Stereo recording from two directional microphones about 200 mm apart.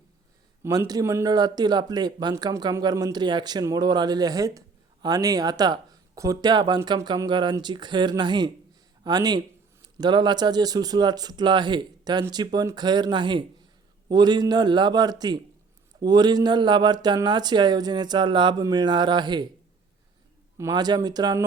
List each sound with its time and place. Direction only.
0.6 s speech: 15° right (ahead or behind)
20.6 s speech: 20° right (ahead or behind)